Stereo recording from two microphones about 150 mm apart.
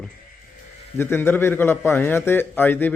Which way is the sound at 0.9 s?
15° left (ahead or behind).